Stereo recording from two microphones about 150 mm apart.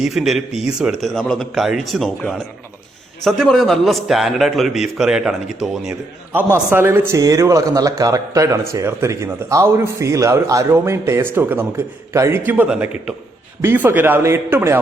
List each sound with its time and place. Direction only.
0.0 s a man's voice: centre (ahead or behind)